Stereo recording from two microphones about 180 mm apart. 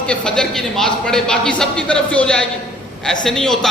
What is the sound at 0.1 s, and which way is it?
Speech, 5° left (ahead or behind).